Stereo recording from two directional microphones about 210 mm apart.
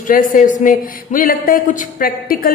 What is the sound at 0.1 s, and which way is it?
Speech, 40° left (ahead or behind).